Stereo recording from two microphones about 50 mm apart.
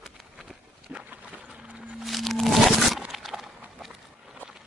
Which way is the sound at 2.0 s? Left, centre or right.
Centre.